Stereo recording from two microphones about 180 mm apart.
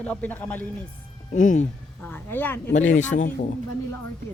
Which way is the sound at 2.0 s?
10° left (ahead or behind).